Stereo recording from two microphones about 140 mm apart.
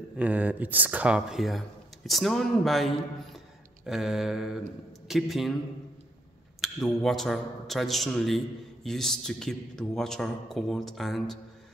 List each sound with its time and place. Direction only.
0.2 s a man's voice: 10° right (ahead or behind)
6.6 s a man's voice: centre (ahead or behind)